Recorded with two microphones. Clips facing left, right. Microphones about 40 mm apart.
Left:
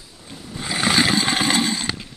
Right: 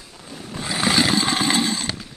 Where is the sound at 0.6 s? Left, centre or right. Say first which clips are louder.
Left 1 dB; centre.